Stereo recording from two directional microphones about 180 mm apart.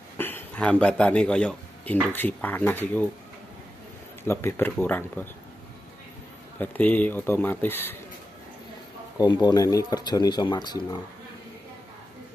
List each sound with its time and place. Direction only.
0.2 s speech: 10° left (ahead or behind)
4.3 s speech: 15° left (ahead or behind)
6.6 s speech: 10° left (ahead or behind)
9.2 s speech: 20° left (ahead or behind)